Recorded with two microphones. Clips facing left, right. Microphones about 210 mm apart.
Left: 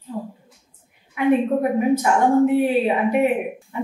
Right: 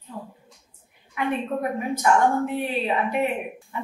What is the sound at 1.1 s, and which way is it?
Speech, 15° left (ahead or behind).